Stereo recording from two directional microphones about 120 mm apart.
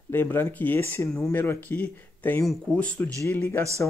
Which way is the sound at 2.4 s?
Centre (ahead or behind).